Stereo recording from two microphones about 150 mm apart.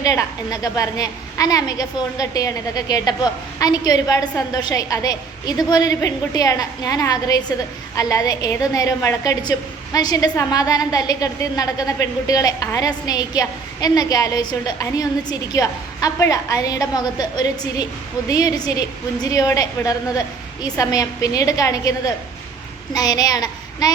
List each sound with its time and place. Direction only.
0.0 s a woman's voice: 20° left (ahead or behind)